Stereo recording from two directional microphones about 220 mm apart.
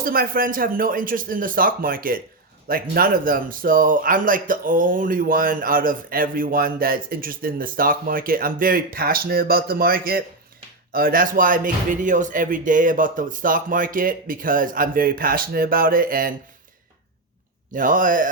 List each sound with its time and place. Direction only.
0.0 s speech: 40° right (ahead or behind)
17.7 s speech: 40° right (ahead or behind)